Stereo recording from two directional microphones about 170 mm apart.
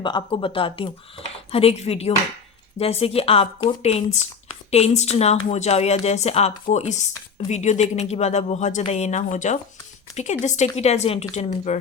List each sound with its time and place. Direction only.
0.0 s speech: 25° left (ahead or behind); by 11.8 s 40° left (ahead or behind)